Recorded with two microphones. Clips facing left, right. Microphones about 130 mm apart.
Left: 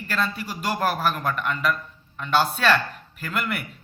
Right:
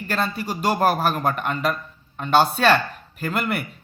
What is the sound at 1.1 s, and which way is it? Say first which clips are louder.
A man's voice: right 3 dB; 30° right (ahead or behind).